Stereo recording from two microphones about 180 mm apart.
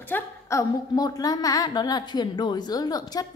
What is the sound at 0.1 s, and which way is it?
A woman's voice, 15° left (ahead or behind).